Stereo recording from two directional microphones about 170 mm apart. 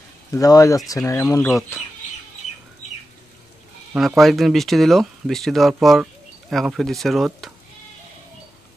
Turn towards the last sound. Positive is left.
turn(degrees=0)  # may be behind; listen again after turning